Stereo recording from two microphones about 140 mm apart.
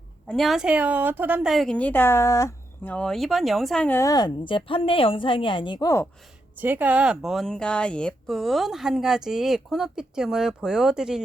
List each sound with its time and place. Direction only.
0.3 s speech: centre (ahead or behind); by 2.9 s 20° left (ahead or behind)
2.9 s speech: 5° left (ahead or behind)
3.8 s a woman's voice: 20° left (ahead or behind)
6.6 s speech: 15° right (ahead or behind)